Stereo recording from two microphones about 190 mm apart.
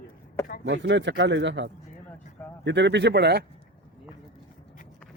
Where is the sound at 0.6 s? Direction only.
70° right (ahead or behind).